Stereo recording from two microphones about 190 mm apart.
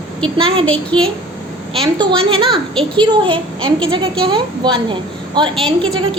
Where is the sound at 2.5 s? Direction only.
Centre (ahead or behind).